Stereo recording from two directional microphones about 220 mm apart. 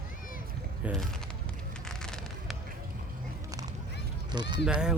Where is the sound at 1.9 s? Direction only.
Centre (ahead or behind).